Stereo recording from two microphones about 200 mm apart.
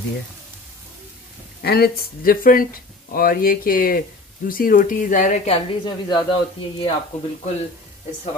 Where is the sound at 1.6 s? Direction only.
50° left (ahead or behind); by 5.6 s 35° left (ahead or behind).